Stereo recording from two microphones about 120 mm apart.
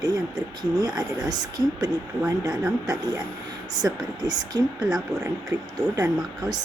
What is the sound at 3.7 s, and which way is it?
Speech, 35° right (ahead or behind).